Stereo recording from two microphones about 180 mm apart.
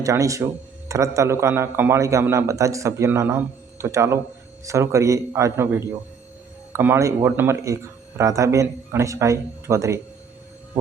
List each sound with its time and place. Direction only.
0.0 s a man's voice: 20° right (ahead or behind)